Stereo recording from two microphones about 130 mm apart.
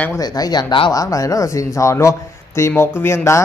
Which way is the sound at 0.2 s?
30° left (ahead or behind).